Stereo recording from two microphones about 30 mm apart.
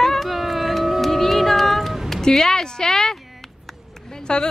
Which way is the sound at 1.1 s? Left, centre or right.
Centre.